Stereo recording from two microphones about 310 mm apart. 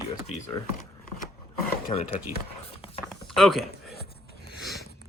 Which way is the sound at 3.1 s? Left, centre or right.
Centre.